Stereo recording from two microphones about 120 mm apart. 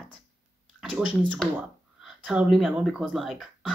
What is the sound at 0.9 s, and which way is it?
Speech, 10° right (ahead or behind).